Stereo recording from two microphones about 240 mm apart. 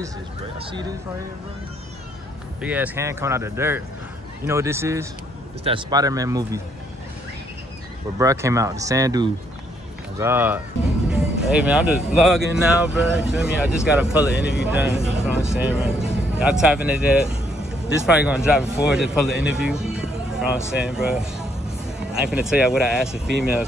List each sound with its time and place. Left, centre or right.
0.6 s speech: right
2.6 s speech: centre
5.6 s speech: right
8.2 s speech: centre